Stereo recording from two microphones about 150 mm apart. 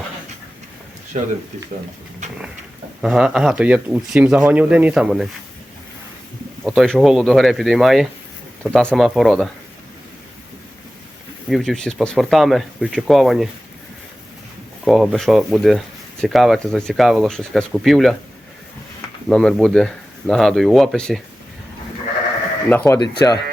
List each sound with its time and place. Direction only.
1.1 s speech: 50° right (ahead or behind)
2.2 s a sound: 50° right (ahead or behind)
3.0 s speech: 5° right (ahead or behind)
6.7 s speech: 5° left (ahead or behind)
11.4 s speech: centre (ahead or behind)
14.8 s speech: centre (ahead or behind)
19.3 s speech: 5° left (ahead or behind)
22.7 s speech: 10° left (ahead or behind)